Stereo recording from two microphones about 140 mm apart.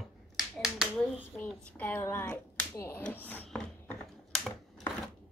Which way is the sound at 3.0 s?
10° left (ahead or behind).